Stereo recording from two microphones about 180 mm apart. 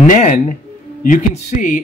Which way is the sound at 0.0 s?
45° left (ahead or behind).